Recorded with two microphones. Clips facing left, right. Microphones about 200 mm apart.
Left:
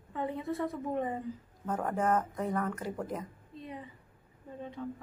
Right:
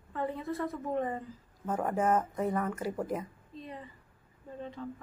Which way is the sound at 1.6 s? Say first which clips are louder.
Right 2 dB; 5° right (ahead or behind).